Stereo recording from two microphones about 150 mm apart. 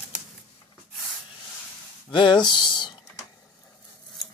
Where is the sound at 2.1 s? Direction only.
30° left (ahead or behind).